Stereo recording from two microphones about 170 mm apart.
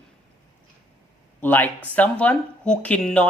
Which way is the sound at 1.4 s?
10° left (ahead or behind).